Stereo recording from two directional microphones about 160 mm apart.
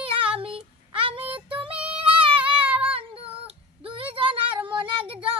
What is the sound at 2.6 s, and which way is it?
Child singing, 10° right (ahead or behind).